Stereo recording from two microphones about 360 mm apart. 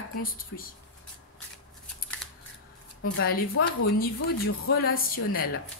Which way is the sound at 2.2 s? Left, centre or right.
Centre.